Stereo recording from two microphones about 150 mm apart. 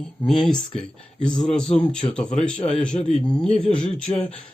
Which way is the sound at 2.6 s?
45° left (ahead or behind).